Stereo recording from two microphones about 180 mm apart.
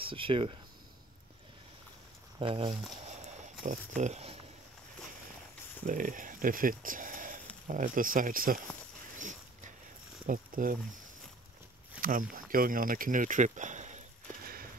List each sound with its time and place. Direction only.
0.0 s speech: 30° right (ahead or behind)
2.3 s speech: 30° right (ahead or behind)
3.6 s speech: 40° right (ahead or behind)
5.9 s speech: 45° right (ahead or behind)
9.2 s a sound: 45° right (ahead or behind)
10.2 s speech: 50° right (ahead or behind)
12.0 s a sound: 50° right (ahead or behind)